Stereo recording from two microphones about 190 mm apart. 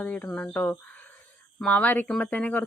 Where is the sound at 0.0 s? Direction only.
10° left (ahead or behind).